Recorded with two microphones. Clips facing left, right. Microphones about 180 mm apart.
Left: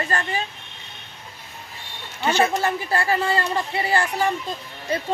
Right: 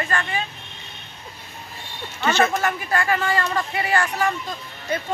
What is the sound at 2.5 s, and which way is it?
Speech, 30° left (ahead or behind).